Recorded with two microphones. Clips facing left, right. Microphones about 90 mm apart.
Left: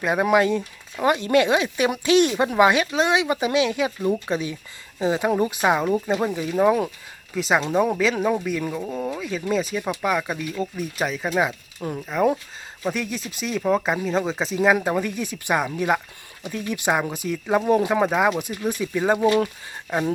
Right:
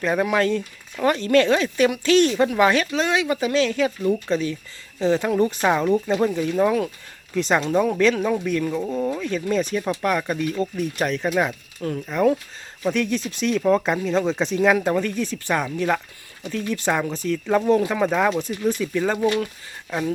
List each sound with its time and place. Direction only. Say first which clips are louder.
0.0 s speech: left 1 dB; 15° left (ahead or behind)
7.3 s speech: right 1 dB; 5° left (ahead or behind)
11.8 s speech: right 2 dB; 20° left (ahead or behind)
12.9 s speech: right 5 dB; 5° left (ahead or behind); by 19.5 s 25° left (ahead or behind)